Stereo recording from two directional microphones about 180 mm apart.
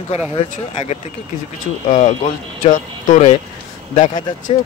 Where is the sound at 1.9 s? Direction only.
40° left (ahead or behind).